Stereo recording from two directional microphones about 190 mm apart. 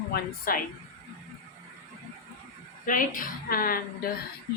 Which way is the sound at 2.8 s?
45° left (ahead or behind).